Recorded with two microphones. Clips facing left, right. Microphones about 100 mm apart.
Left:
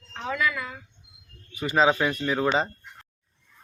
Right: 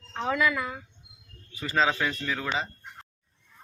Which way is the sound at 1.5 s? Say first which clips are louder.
Left 4 dB; 15° left (ahead or behind).